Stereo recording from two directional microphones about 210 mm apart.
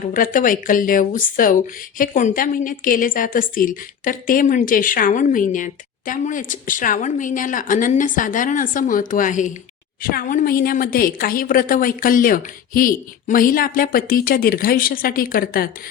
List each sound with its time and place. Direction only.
0.1 s a woman's voice: 40° left (ahead or behind)